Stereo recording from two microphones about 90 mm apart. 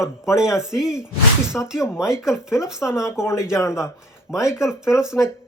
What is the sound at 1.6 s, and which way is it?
Speech, 15° left (ahead or behind).